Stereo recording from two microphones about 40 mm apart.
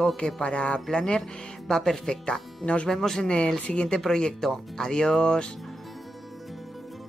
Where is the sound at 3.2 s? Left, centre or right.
Left.